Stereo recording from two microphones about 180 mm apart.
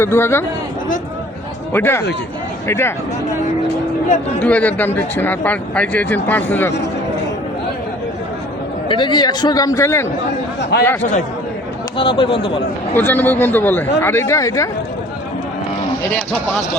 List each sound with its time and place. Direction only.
0.0 s speech: 15° left (ahead or behind)
1.7 s speech: 10° left (ahead or behind)
4.4 s speech: 10° left (ahead or behind)
8.9 s a man's voice: 25° left (ahead or behind)
10.6 s speech: 70° left (ahead or behind)
11.9 s speech: 30° left (ahead or behind)
12.9 s speech: 10° left (ahead or behind)